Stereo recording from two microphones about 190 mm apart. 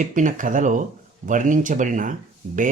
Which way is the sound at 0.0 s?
45° right (ahead or behind).